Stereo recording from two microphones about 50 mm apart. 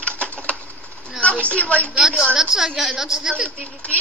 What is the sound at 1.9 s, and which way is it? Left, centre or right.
Speech, centre.